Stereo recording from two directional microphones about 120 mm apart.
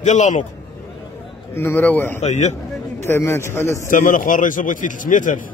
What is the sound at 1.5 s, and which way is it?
Speech, 15° left (ahead or behind).